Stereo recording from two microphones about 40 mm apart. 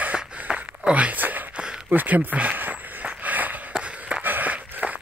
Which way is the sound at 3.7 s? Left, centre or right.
Right.